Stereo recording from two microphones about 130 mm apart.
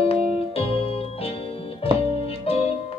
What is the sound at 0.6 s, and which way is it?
Music, 45° left (ahead or behind).